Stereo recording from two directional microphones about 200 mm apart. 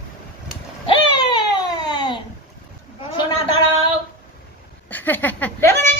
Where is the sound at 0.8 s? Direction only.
20° left (ahead or behind).